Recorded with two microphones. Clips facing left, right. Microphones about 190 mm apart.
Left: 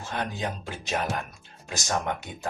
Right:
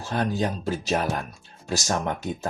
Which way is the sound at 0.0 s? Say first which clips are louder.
Right 6 dB; 35° right (ahead or behind).